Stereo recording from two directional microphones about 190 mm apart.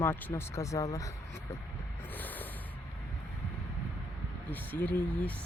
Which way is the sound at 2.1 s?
10° left (ahead or behind).